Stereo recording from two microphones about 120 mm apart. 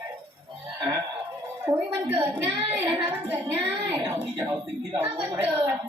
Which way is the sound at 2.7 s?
20° right (ahead or behind).